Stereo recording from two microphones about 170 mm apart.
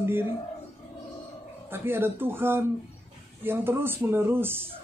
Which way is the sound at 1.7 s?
15° right (ahead or behind).